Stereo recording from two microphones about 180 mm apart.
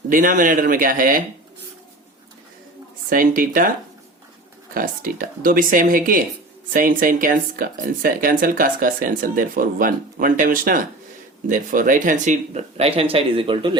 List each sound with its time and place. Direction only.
0.1 s speech: 50° right (ahead or behind)
3.1 s speech: 50° right (ahead or behind)
4.7 s speech: 50° right (ahead or behind); by 13.7 s 30° right (ahead or behind)